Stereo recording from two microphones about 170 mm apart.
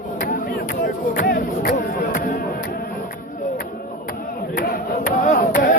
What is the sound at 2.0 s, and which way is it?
Music, 65° left (ahead or behind).